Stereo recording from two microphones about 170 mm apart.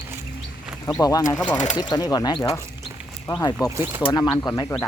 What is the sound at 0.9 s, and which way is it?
Speech, 20° left (ahead or behind).